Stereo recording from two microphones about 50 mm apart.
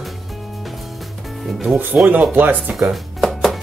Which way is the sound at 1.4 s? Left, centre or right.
Centre.